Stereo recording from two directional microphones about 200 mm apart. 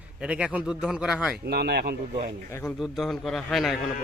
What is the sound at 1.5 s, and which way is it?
Speech, 50° right (ahead or behind).